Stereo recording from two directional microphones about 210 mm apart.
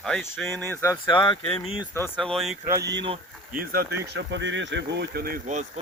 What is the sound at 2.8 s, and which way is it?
Speech, 55° right (ahead or behind).